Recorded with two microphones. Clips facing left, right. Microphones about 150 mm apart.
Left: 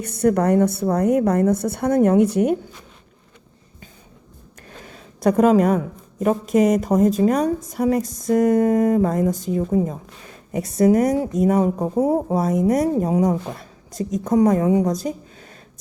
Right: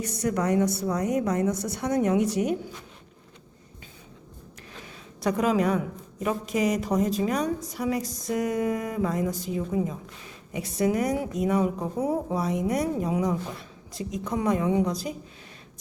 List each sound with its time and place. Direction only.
0.0 s a woman's voice: 55° left (ahead or behind)
4.7 s a sound: 45° left (ahead or behind)
6.5 s a woman's voice: 45° left (ahead or behind)